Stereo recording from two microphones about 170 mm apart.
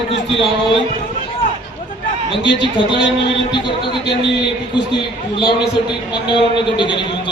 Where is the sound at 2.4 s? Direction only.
90° left.